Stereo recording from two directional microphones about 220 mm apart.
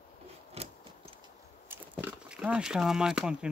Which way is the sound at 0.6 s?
30° right (ahead or behind).